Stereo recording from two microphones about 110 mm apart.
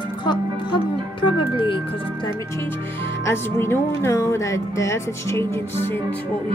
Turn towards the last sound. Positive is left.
turn(degrees=20)  # may be behind; listen again after turning